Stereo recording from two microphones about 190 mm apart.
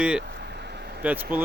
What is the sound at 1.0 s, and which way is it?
Speech, 10° right (ahead or behind).